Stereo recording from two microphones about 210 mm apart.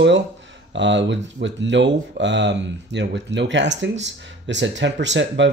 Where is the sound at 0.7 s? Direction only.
60° right (ahead or behind).